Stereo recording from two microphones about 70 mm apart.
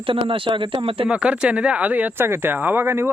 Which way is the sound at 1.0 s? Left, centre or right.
Centre.